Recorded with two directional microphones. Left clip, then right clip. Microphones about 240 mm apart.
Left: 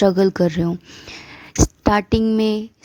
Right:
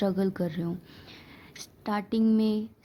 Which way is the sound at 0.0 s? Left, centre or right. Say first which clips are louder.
Left 14 dB; left.